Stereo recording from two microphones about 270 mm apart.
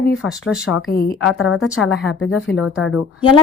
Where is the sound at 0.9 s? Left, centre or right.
Left.